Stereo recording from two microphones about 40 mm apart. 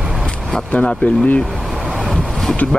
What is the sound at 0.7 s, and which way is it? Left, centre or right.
Speech, left.